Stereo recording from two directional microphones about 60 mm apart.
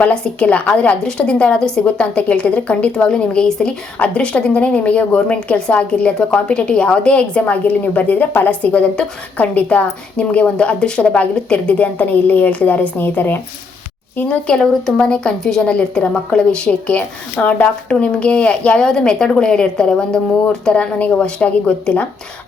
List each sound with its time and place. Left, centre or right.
0.0 s a woman's voice: centre
14.3 s a woman's voice: centre